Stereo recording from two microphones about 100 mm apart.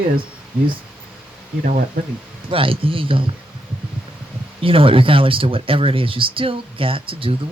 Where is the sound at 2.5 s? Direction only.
65° right (ahead or behind).